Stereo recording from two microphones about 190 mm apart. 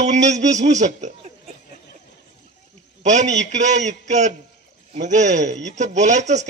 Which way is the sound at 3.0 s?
40° right (ahead or behind).